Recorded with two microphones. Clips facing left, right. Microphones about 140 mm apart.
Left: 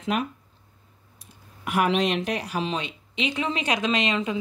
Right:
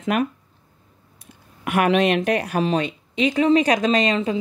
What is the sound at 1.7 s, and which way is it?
A woman's voice, 60° right (ahead or behind).